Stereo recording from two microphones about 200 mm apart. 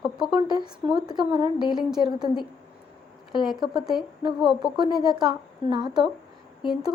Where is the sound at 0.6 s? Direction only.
20° right (ahead or behind).